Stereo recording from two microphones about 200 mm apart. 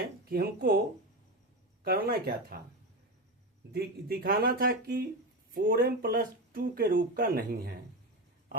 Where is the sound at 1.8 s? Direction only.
50° right (ahead or behind).